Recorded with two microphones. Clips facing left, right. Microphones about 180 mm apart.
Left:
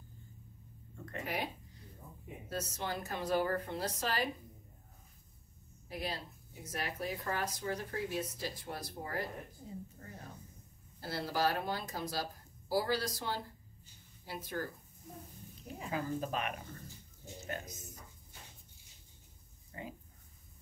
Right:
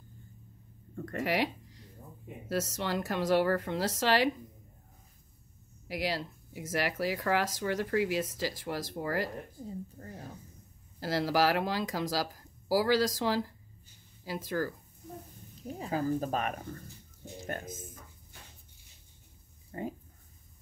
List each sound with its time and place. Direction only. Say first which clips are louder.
0.9 s speech: right 7 dB; 45° right (ahead or behind)
1.2 s a sound: right 9 dB; 90° right
2.5 s speech: right 7 dB; 90° right
5.9 s speech: right 7 dB; 90° right
10.0 s speech: right 6 dB; 40° right (ahead or behind)
11.0 s speech: right 7 dB; 90° right
15.8 s speech: right 6 dB; 35° right (ahead or behind)
19.7 s speech: right 9 dB; 45° right (ahead or behind)